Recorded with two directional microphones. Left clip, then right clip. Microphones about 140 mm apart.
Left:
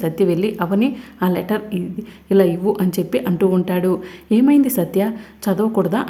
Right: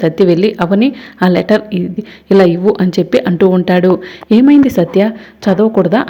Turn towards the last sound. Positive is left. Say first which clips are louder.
# right 8 dB
turn(degrees=-25)  # may be behind; listen again after turning